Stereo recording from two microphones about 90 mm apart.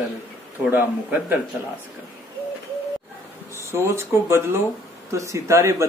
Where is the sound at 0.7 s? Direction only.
20° right (ahead or behind).